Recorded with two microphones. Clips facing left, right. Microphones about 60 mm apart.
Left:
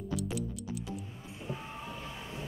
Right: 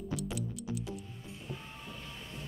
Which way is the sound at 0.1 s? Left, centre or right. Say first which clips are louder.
Left 3 dB; centre.